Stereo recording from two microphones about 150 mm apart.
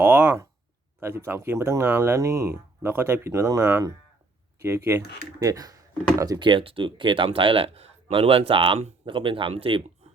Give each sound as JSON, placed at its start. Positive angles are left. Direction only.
{"t": 0.0, "sound": "speech", "side_deg": -15}